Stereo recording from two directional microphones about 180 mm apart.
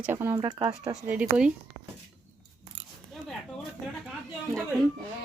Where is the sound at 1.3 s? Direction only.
5° right (ahead or behind).